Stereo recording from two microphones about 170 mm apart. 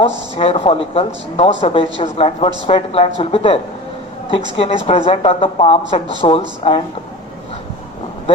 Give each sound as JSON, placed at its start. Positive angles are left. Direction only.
{"t": 0.3, "sound": "speech", "side_deg": 35}